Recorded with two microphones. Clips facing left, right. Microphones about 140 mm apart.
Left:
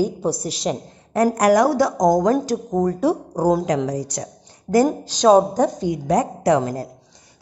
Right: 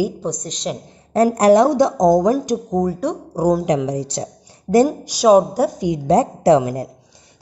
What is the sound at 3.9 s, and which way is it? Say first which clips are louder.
Speech: right 3 dB; 25° right (ahead or behind).